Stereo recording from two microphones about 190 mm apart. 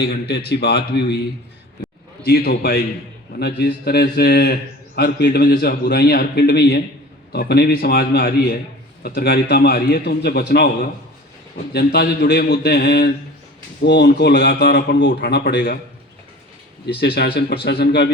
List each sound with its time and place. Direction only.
0.0 s speech: 60° left (ahead or behind)
2.2 s speech: 55° left (ahead or behind)
11.7 s speech: 55° left (ahead or behind)
17.2 s speech: 55° left (ahead or behind)